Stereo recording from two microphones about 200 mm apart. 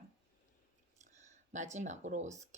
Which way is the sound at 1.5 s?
35° right (ahead or behind).